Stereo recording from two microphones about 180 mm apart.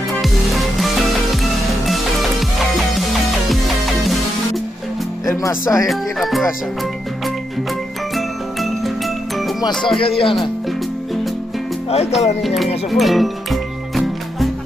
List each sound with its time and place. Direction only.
0.1 s music: centre (ahead or behind)
5.3 s speech: 15° left (ahead or behind)
5.9 s speech: centre (ahead or behind)
8.1 s music: centre (ahead or behind)
9.9 s speech: 30° left (ahead or behind)
12.2 s speech: 40° left (ahead or behind)
12.9 s music: centre (ahead or behind)